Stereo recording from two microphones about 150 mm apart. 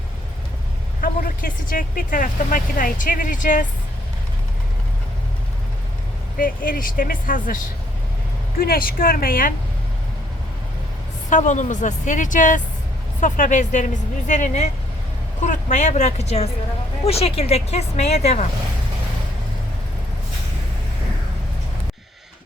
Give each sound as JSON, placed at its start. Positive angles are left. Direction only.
{"t": 1.0, "sound": "speech", "side_deg": 70}
{"t": 6.3, "sound": "speech", "side_deg": 70}
{"t": 8.5, "sound": "speech", "side_deg": 85}
{"t": 11.3, "sound": "a woman's voice", "side_deg": 55}